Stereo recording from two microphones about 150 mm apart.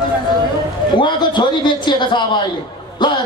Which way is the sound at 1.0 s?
30° left (ahead or behind).